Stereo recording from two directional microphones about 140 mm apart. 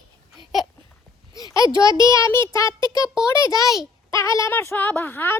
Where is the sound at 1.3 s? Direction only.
25° left (ahead or behind).